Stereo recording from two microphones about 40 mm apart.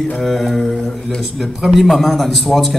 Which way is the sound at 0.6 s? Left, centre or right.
Centre.